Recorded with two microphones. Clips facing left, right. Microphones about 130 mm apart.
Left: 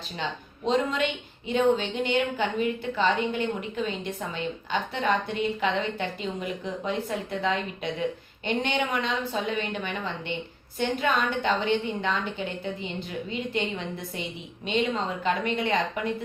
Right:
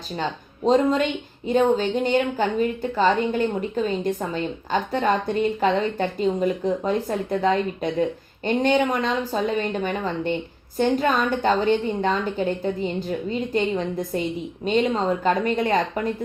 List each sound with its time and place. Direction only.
0.2 s a woman's voice: 40° right (ahead or behind)